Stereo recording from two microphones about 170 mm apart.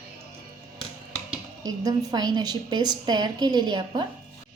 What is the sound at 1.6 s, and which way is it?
A woman's voice, 20° right (ahead or behind).